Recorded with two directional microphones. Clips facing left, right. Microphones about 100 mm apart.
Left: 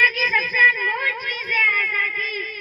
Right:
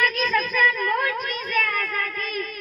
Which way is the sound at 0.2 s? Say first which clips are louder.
Even; 30° right (ahead or behind).